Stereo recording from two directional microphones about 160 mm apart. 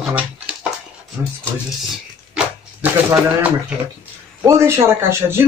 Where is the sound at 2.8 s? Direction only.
10° right (ahead or behind).